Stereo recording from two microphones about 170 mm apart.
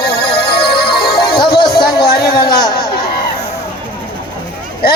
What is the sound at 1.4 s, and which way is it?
Music, 25° left (ahead or behind).